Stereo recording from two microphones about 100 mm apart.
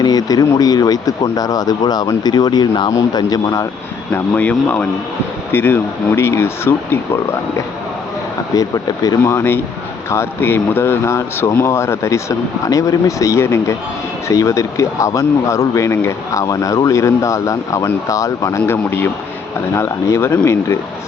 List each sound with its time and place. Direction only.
0.0 s speech: 40° left (ahead or behind)
4.1 s speech: 15° left (ahead or behind)
8.5 s speech: 35° left (ahead or behind)